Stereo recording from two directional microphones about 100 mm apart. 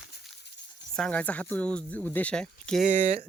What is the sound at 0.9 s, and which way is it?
Speech, 10° left (ahead or behind).